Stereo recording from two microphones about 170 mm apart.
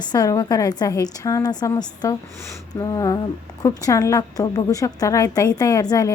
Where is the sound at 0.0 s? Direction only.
25° left (ahead or behind).